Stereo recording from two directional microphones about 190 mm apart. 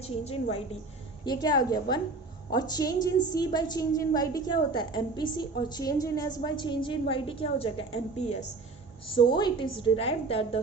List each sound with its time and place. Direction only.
0.0 s a woman's voice: 35° left (ahead or behind)
1.2 s a woman's voice: 20° left (ahead or behind)
9.1 s a woman's voice: 25° left (ahead or behind)